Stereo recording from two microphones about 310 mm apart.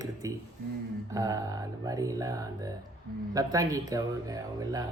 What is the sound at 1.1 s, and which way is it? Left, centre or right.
Speech, centre.